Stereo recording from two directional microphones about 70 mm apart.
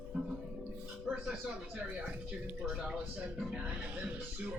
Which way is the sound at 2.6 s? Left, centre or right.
Centre.